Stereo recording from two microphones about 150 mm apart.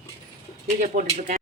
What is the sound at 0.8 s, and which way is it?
Speech, 55° right (ahead or behind).